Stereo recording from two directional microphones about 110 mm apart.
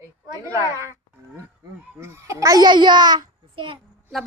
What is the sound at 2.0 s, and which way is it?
Speech, 25° right (ahead or behind).